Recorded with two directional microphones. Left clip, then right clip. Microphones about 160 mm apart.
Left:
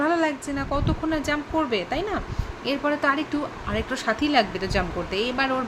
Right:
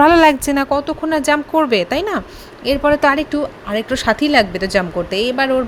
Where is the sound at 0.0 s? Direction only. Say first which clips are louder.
Right 13 dB; 70° right (ahead or behind).